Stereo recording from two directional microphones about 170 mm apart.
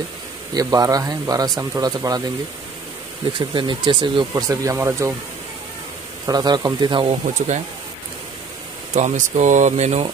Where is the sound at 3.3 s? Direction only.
30° right (ahead or behind).